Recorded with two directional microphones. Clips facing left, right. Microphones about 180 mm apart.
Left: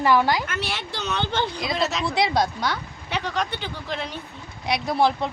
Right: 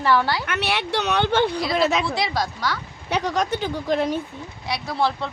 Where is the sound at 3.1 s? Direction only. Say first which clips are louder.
Right 4 dB; 40° right (ahead or behind).